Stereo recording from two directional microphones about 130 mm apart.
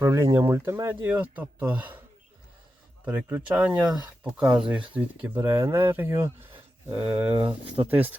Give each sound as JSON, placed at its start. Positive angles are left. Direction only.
{"t": 0.0, "sound": "speech", "side_deg": -20}
{"t": 3.0, "sound": "speech", "side_deg": -10}